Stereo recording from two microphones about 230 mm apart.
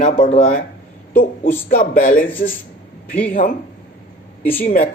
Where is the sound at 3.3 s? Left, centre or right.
Left.